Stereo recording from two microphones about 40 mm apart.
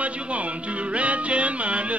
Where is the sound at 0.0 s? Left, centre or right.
Right.